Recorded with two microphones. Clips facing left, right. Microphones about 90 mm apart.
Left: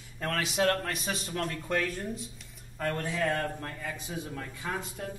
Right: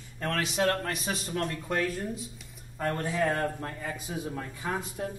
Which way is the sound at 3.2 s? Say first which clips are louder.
Right 3 dB; 20° right (ahead or behind).